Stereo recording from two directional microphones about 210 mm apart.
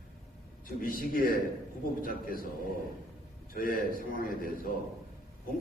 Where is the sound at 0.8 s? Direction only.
45° left (ahead or behind).